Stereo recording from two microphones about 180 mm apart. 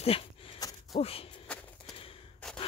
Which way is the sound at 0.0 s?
30° left (ahead or behind).